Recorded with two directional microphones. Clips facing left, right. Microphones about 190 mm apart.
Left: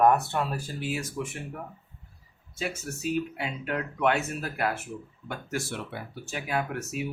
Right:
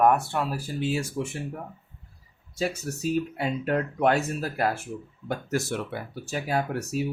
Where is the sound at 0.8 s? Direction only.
30° right (ahead or behind).